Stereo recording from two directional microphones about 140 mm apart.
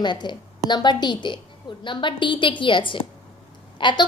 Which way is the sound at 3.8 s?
35° left (ahead or behind).